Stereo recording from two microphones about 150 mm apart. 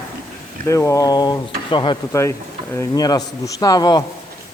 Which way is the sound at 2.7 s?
20° left (ahead or behind).